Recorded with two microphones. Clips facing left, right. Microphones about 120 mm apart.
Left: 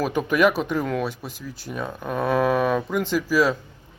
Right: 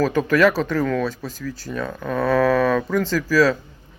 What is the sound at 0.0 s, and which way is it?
Speech, 15° left (ahead or behind).